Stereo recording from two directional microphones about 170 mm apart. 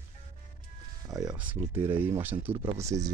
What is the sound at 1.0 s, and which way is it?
Music, 20° right (ahead or behind).